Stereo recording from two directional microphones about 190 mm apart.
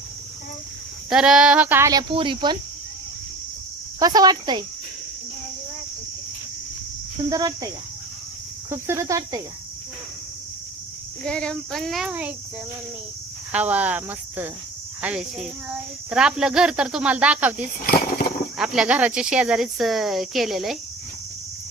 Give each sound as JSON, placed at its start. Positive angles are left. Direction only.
{"t": 1.1, "sound": "speech", "side_deg": -5}
{"t": 4.0, "sound": "speech", "side_deg": -20}
{"t": 7.3, "sound": "speech", "side_deg": -20}
{"t": 8.7, "sound": "speech", "side_deg": -15}
{"t": 11.2, "sound": "speech", "side_deg": 5}
{"t": 13.5, "sound": "speech", "side_deg": -10}
{"t": 17.8, "sound": "speech", "side_deg": 50}
{"t": 18.5, "sound": "speech", "side_deg": -5}